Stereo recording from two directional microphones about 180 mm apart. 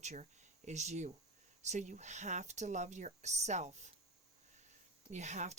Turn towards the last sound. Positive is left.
turn(degrees=-40)  # may be behind; listen again after turning